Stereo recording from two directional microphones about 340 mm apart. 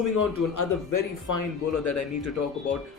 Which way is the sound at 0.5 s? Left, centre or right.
Left.